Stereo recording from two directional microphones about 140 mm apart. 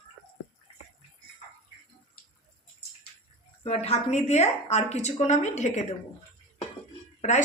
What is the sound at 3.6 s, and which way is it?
A woman's voice, 50° left (ahead or behind).